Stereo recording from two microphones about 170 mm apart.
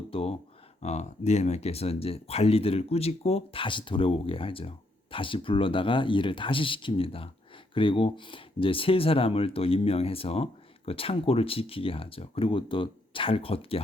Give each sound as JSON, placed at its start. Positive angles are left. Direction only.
{"t": 0.1, "sound": "speech", "side_deg": 35}